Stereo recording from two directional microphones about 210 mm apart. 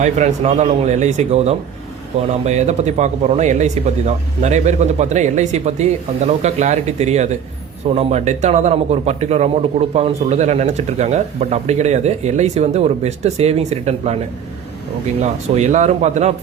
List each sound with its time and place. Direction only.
0.0 s a man's voice: 35° right (ahead or behind)
15.2 s a man's voice: 35° right (ahead or behind)